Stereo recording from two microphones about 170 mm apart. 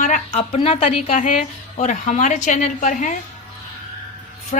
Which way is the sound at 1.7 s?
45° left (ahead or behind).